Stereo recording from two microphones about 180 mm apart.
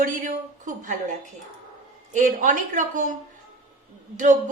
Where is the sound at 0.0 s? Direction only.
45° right (ahead or behind).